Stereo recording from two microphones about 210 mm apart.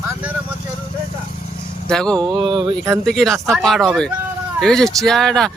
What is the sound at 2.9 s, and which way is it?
Speech, centre (ahead or behind).